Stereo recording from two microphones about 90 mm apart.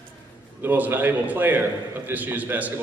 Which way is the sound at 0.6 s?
20° right (ahead or behind).